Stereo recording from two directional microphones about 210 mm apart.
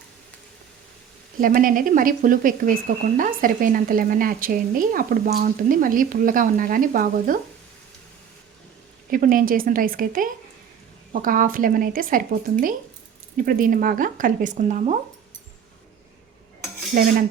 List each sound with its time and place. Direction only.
1.4 s speech: 40° right (ahead or behind)
9.0 s speech: 40° right (ahead or behind)
16.9 s dishes: 45° right (ahead or behind)